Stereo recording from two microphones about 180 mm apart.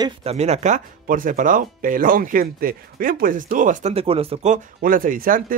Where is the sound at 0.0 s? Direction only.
35° right (ahead or behind).